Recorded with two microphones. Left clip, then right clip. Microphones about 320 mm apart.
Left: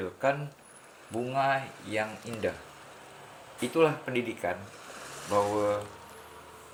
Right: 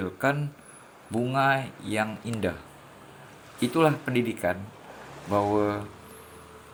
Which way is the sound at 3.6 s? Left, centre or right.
Right.